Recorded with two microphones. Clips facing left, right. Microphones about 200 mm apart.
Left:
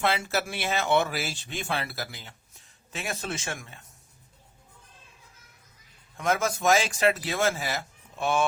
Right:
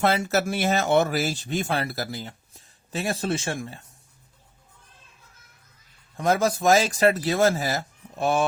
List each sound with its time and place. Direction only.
0.0 s a man's voice: 40° right (ahead or behind)
6.1 s a man's voice: 35° right (ahead or behind)